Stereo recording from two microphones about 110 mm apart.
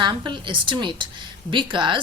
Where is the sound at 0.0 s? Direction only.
45° right (ahead or behind).